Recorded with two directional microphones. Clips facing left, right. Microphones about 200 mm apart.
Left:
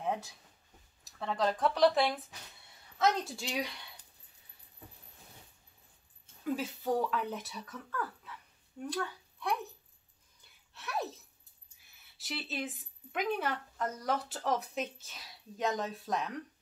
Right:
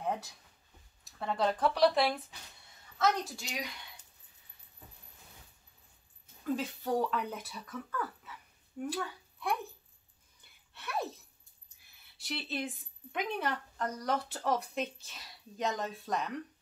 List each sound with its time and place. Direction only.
1.2 s speech: 5° right (ahead or behind)
3.0 s a woman's voice: 30° left (ahead or behind)
6.5 s speech: 5° left (ahead or behind)
10.7 s a sound: centre (ahead or behind)
12.2 s speech: centre (ahead or behind)